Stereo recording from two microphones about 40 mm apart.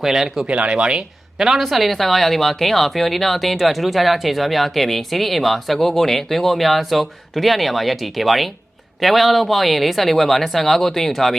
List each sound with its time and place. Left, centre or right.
0.0 s speech: centre
0.4 s speech: right
0.8 s speech: right
1.5 s speech: centre